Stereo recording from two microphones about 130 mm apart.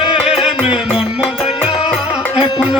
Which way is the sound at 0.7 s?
5° right (ahead or behind).